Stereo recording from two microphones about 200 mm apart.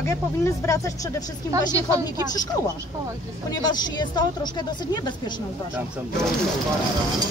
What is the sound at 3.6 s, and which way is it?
Speech, 20° left (ahead or behind).